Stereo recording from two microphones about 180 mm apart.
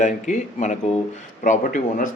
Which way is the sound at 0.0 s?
40° left (ahead or behind).